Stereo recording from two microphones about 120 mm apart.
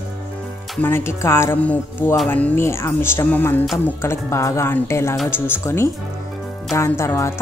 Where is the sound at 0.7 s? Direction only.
20° left (ahead or behind).